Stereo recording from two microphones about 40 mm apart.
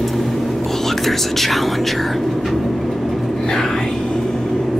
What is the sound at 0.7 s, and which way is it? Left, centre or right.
Speech, centre.